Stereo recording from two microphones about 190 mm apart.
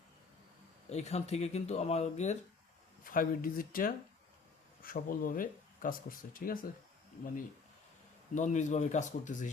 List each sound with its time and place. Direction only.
0.9 s speech: 35° left (ahead or behind)
3.0 s speech: 45° left (ahead or behind)
8.4 s speech: 40° left (ahead or behind)